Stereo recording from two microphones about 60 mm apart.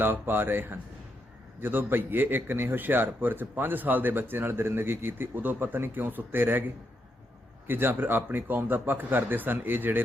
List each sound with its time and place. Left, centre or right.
0.0 s a man's voice: right
7.7 s a man's voice: right